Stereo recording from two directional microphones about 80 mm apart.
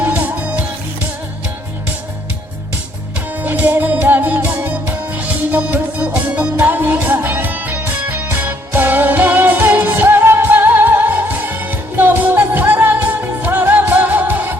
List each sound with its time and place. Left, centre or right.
0.0 s music: centre
3.4 s music: right